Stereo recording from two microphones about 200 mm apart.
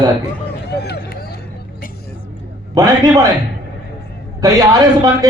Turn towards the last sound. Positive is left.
turn(degrees=-20)  # may be behind; listen again after turning